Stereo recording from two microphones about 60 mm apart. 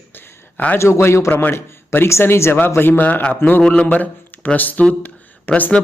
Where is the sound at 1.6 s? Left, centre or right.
Left.